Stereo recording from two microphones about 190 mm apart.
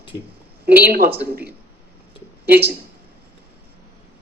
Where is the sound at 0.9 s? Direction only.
50° right (ahead or behind).